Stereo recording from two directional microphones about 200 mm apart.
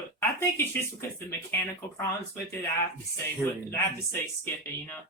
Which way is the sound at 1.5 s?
10° left (ahead or behind).